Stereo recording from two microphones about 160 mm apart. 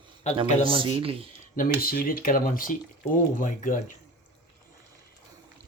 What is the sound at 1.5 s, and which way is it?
Speech, 65° left (ahead or behind).